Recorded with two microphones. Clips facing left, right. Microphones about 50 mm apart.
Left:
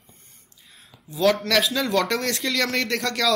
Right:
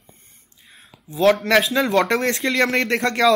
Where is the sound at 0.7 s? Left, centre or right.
Right.